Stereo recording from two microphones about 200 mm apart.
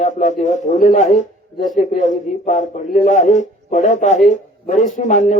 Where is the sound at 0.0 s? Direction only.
35° left (ahead or behind).